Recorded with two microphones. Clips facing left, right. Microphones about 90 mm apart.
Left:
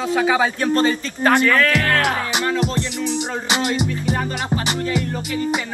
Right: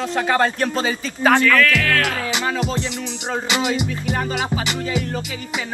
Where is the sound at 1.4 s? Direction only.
25° left (ahead or behind).